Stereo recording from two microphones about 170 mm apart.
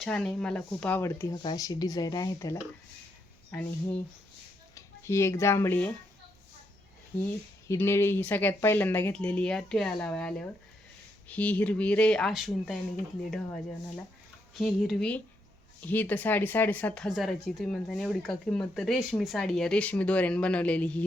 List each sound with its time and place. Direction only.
0.0 s speech: centre (ahead or behind); by 2.6 s 20° left (ahead or behind)
3.5 s speech: 10° left (ahead or behind)
7.7 s speech: 15° left (ahead or behind)
14.5 s speech: centre (ahead or behind)